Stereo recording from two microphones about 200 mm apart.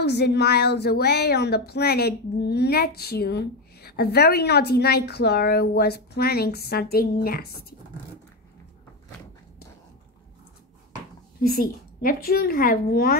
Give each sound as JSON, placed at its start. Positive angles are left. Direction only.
{"t": 0.0, "sound": "speech", "side_deg": 55}
{"t": 11.4, "sound": "speech", "side_deg": 50}